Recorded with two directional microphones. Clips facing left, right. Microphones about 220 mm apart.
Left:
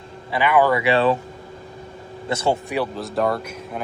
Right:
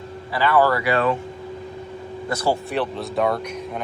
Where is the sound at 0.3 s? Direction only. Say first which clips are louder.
Left 1 dB; 15° left (ahead or behind).